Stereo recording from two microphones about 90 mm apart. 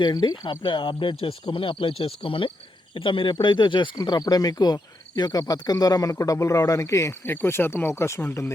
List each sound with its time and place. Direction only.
0.0 s speech: 55° left (ahead or behind)
0.6 s speech: 70° left (ahead or behind); by 2.5 s 90° left
2.9 s speech: 70° left (ahead or behind)
3.9 s cricket: 50° left (ahead or behind); by 8.5 s 30° left (ahead or behind)